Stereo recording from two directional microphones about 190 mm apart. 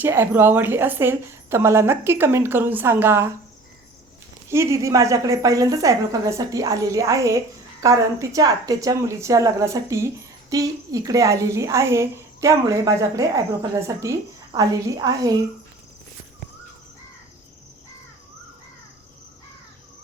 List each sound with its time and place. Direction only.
0.0 s a woman's voice: 10° right (ahead or behind)
4.4 s a woman's voice: 15° right (ahead or behind)